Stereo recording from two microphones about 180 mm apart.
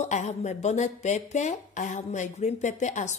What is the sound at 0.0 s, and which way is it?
Speech, 40° left (ahead or behind).